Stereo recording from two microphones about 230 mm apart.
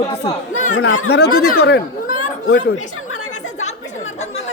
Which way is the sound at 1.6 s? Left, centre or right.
Left.